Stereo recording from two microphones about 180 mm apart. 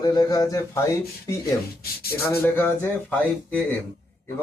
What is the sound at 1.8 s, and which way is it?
Speech, 60° left (ahead or behind).